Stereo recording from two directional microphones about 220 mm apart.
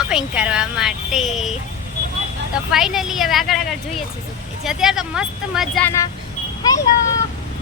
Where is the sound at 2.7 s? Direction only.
Centre (ahead or behind).